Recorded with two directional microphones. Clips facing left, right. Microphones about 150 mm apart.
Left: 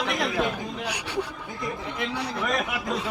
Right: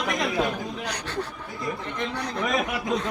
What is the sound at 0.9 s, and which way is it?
A man's voice, 10° left (ahead or behind).